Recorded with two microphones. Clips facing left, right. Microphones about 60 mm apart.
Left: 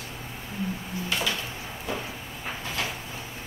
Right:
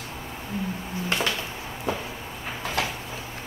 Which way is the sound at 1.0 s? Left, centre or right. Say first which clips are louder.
Right 3 dB; right.